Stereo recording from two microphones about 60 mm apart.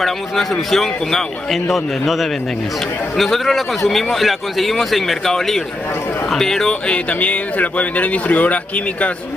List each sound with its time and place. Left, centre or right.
0.0 s a man's voice: centre; by 9.1 s left